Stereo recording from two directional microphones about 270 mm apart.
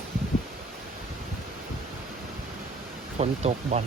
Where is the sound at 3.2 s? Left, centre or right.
Right.